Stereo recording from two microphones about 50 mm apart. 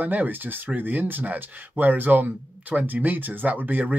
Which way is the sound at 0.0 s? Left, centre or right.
Right.